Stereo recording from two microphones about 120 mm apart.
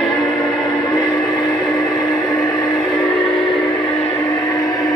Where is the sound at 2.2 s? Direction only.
30° left (ahead or behind).